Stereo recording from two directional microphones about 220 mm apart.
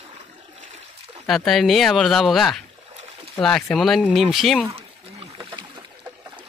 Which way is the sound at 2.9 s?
30° right (ahead or behind).